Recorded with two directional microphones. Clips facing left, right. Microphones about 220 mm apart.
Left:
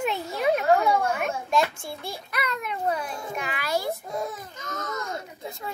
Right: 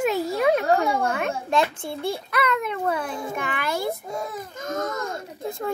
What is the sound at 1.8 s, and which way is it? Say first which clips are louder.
Speech: right 8 dB; 55° right (ahead or behind).